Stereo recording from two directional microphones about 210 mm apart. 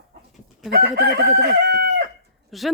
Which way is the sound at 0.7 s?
50° right (ahead or behind).